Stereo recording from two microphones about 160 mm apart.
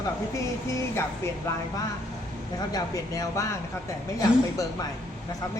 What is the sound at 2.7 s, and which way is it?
Speech, 20° left (ahead or behind).